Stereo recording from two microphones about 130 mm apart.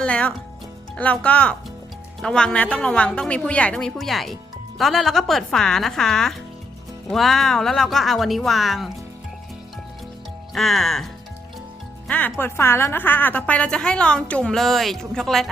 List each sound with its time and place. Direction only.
0.0 s a woman's voice: 10° left (ahead or behind)
10.5 s speech: centre (ahead or behind)
12.0 s a woman's voice: 10° left (ahead or behind)